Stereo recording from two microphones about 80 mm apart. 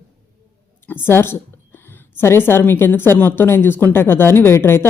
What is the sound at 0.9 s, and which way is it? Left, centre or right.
A woman's voice, left.